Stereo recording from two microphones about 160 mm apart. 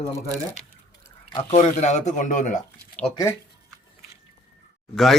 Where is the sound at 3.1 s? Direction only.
20° left (ahead or behind).